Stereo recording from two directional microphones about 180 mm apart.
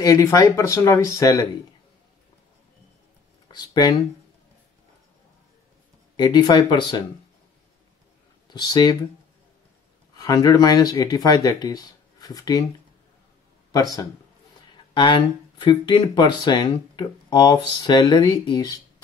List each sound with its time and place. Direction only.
0.0 s speech: 15° left (ahead or behind)
3.5 s speech: 25° left (ahead or behind)
6.1 s speech: 25° left (ahead or behind)
8.5 s speech: 25° left (ahead or behind)
10.1 s speech: 20° left (ahead or behind)
13.7 s speech: 20° left (ahead or behind)